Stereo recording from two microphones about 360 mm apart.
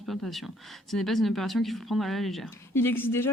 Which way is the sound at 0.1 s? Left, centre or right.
Centre.